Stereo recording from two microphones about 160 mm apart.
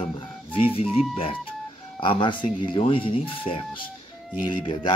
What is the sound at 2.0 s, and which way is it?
Speech, 30° left (ahead or behind).